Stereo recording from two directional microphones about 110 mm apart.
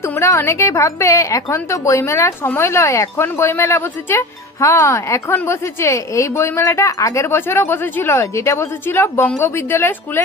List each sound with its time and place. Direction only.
0.2 s speech: 25° left (ahead or behind)